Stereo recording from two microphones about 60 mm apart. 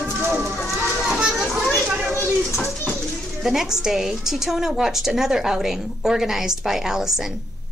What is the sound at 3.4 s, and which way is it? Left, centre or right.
A woman's voice, centre.